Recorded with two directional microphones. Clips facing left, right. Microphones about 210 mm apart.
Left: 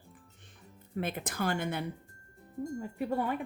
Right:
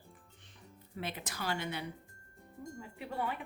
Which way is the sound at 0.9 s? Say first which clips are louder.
Left 7 dB; 50° left (ahead or behind).